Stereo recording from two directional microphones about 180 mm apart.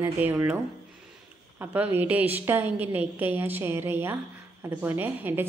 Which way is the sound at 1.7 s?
10° right (ahead or behind).